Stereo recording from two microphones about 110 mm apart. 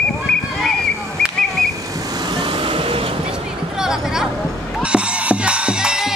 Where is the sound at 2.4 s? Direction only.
50° right (ahead or behind).